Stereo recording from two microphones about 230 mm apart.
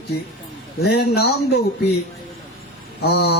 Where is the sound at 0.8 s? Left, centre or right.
Left.